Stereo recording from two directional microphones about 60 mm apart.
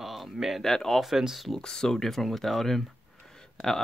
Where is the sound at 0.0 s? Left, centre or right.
Centre.